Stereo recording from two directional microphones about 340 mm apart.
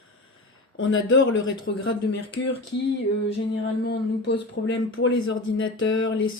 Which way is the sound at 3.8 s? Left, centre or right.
Left.